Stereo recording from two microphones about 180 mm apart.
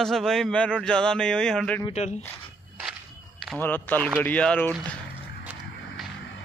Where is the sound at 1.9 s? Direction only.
40° left (ahead or behind).